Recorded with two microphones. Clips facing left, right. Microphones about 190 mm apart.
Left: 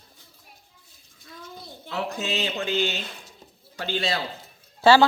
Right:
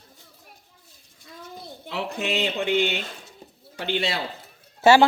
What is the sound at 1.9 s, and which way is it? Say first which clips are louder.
A man's voice: right 1 dB; 15° right (ahead or behind).